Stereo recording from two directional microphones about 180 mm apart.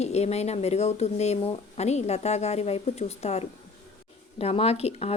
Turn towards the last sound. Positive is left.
turn(degrees=35)  # may be behind; listen again after turning